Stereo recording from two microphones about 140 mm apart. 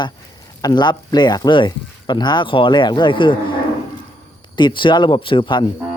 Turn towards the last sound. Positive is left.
turn(degrees=35)  # may be behind; listen again after turning